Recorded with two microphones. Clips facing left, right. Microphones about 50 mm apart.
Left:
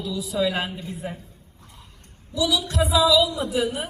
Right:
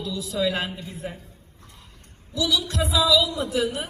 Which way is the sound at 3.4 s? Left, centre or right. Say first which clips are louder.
Left 1 dB; centre.